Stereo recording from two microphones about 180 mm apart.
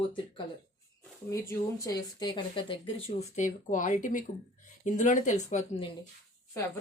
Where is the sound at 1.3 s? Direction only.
15° left (ahead or behind); by 5.9 s 35° left (ahead or behind).